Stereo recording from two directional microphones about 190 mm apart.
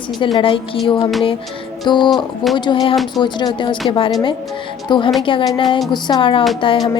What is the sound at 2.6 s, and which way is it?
Speech, 25° left (ahead or behind).